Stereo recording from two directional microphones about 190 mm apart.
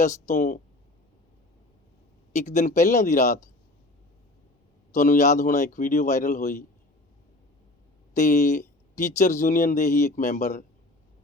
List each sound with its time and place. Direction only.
0.0 s speech: 40° left (ahead or behind)
2.3 s speech: 40° left (ahead or behind)
4.9 s speech: 40° left (ahead or behind)
8.1 s speech: 40° left (ahead or behind)